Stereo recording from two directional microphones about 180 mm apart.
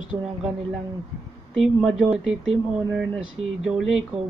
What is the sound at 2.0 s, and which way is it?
Speech, 5° right (ahead or behind).